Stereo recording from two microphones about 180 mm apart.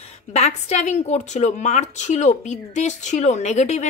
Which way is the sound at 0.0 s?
40° left (ahead or behind).